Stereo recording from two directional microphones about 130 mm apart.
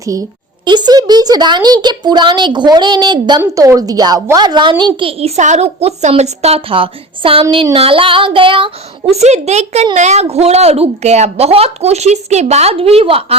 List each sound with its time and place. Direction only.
0.0 s speech: 25° right (ahead or behind)
3.4 s a woman's voice: 25° right (ahead or behind); by 13.3 s 50° right (ahead or behind)